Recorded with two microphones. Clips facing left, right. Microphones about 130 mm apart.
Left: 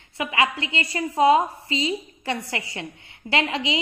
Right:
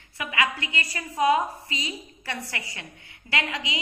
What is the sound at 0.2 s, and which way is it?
A woman's voice, 25° left (ahead or behind).